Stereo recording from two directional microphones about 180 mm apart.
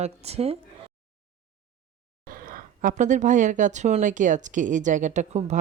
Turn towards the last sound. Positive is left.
turn(degrees=-40)  # may be behind; listen again after turning